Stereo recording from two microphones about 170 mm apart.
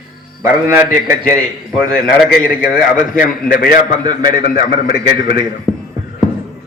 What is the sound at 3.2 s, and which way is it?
A man's voice, 60° left (ahead or behind).